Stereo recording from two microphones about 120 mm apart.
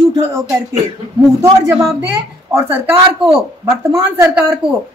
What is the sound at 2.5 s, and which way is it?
A woman's voice, 15° right (ahead or behind).